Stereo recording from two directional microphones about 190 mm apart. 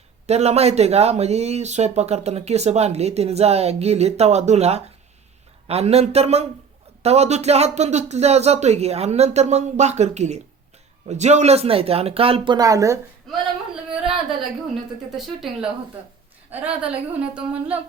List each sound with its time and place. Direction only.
0.3 s speech: 35° right (ahead or behind); by 13.0 s 15° right (ahead or behind)
15.1 s a woman's voice: centre (ahead or behind)